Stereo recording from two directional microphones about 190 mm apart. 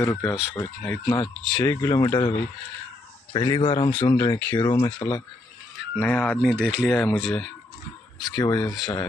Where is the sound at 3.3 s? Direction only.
25° left (ahead or behind).